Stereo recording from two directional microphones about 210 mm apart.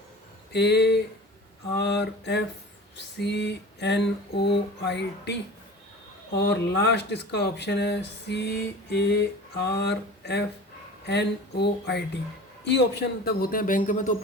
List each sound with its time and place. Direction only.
0.5 s speech: 55° left (ahead or behind); by 14.2 s 40° left (ahead or behind)